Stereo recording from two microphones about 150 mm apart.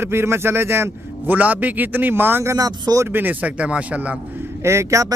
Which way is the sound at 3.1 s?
10° right (ahead or behind).